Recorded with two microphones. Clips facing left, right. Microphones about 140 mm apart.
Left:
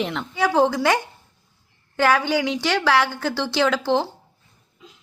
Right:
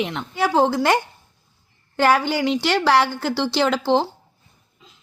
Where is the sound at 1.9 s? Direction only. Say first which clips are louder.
Right 1 dB; 15° right (ahead or behind).